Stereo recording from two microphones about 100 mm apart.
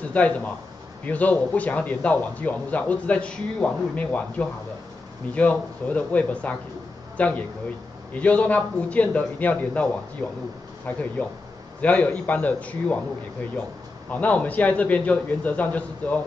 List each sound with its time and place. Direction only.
0.1 s a man's voice: 15° left (ahead or behind)
10.9 s a man's voice: 15° left (ahead or behind)
14.1 s a man's voice: 15° left (ahead or behind)